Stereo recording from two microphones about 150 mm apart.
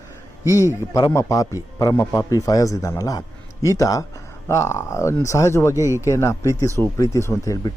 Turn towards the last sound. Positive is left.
turn(degrees=20)  # may be behind; listen again after turning